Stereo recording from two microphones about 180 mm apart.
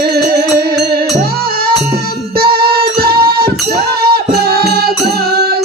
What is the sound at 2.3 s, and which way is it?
Music, 60° right (ahead or behind).